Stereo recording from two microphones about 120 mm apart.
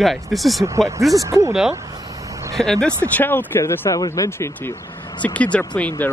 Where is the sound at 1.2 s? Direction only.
30° right (ahead or behind).